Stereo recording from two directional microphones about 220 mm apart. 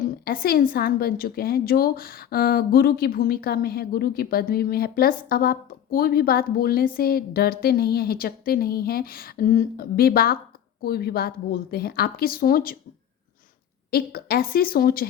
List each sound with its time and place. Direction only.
0.3 s a woman's voice: 40° left (ahead or behind)
13.9 s a woman's voice: 45° left (ahead or behind)